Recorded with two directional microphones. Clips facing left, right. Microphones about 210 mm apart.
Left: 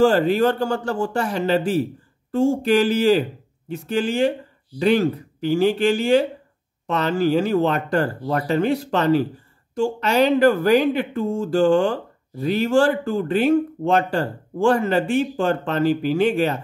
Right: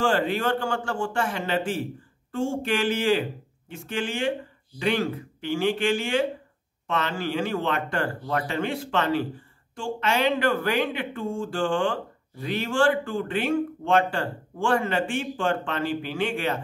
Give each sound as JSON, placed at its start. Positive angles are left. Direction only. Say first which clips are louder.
{"t": 0.0, "sound": "speech", "louder": "left 8 dB", "side_deg": 40}